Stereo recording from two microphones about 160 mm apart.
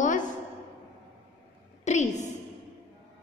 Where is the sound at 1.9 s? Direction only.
45° left (ahead or behind).